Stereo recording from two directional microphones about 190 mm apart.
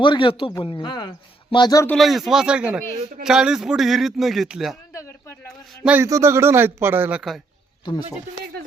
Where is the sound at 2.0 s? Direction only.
Centre (ahead or behind).